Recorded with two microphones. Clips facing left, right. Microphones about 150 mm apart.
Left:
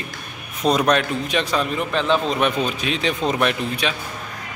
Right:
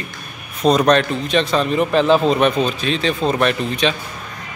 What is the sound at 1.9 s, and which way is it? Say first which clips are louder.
Speech: right 6 dB; 40° right (ahead or behind).